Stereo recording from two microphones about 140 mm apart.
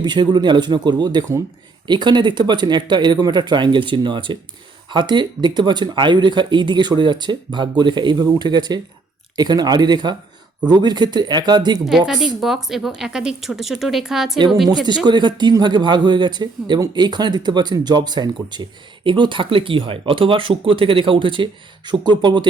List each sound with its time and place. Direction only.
0.0 s speech: 30° right (ahead or behind)
11.9 s a woman's voice: 5° right (ahead or behind)
14.8 s speech: 30° right (ahead or behind)